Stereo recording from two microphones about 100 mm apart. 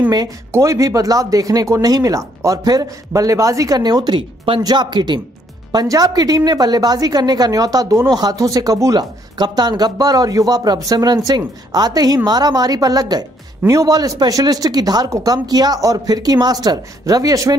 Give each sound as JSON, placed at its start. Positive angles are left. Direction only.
{"t": 0.5, "sound": "speech", "side_deg": -30}
{"t": 9.4, "sound": "speech", "side_deg": -45}